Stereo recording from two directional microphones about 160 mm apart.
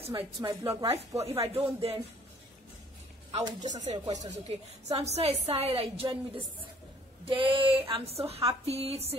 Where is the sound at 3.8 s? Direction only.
45° right (ahead or behind).